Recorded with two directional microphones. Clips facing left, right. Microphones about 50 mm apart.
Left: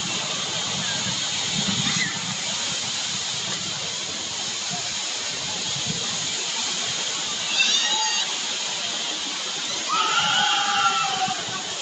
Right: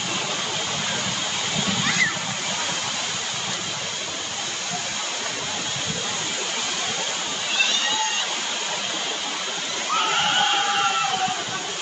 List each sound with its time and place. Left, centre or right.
9.9 s neigh: centre
10.3 s music: centre